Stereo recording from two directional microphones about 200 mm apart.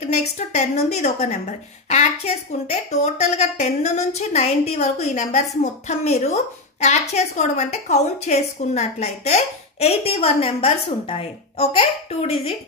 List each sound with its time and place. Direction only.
0.0 s a woman's voice: 35° left (ahead or behind)